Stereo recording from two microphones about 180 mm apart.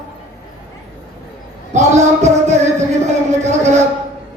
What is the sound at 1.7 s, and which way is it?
Music, 40° right (ahead or behind).